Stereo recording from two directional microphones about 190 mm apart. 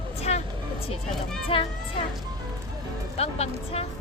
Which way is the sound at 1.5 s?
30° left (ahead or behind).